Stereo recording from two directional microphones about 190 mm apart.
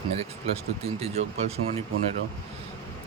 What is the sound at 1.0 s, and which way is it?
Speech, 35° right (ahead or behind).